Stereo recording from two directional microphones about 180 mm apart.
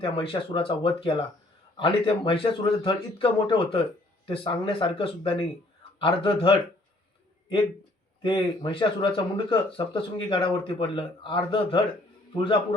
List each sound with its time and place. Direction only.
0.0 s speech: 30° left (ahead or behind)
8.2 s speech: 25° left (ahead or behind)